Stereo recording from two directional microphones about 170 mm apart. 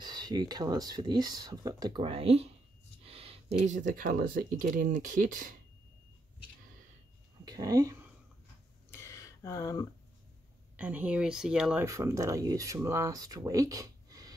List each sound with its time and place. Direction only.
0.0 s speech: 25° right (ahead or behind); by 5.6 s 50° right (ahead or behind)
7.4 s speech: 20° right (ahead or behind)
8.9 s a sound: 20° left (ahead or behind)
10.8 s speech: 10° right (ahead or behind)
11.8 s speech: 20° right (ahead or behind)